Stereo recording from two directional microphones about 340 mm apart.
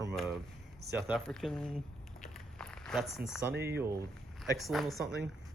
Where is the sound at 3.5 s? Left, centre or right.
Right.